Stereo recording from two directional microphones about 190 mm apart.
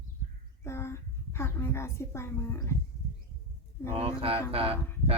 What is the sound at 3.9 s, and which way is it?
Speech, 30° right (ahead or behind).